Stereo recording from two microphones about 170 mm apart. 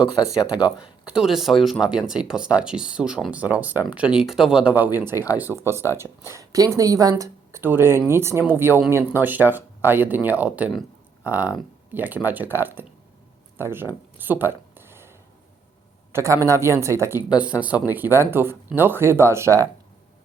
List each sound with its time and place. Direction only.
0.3 s speech: 5° right (ahead or behind)
14.2 s a sound: 10° right (ahead or behind)
16.1 s speech: 15° right (ahead or behind)